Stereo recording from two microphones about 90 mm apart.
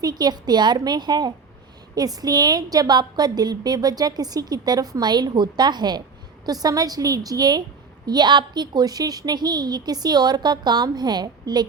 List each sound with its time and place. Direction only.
0.0 s a woman's voice: 50° right (ahead or behind)